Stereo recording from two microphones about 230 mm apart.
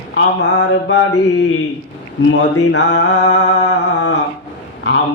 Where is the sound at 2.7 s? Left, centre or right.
Left.